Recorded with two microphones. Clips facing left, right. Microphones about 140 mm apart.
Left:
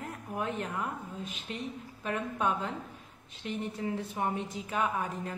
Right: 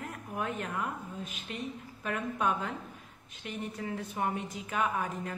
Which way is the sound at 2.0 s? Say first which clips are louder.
Even; 25° left (ahead or behind).